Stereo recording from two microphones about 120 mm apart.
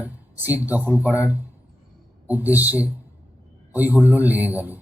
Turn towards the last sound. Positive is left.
turn(degrees=-15)  # may be behind; listen again after turning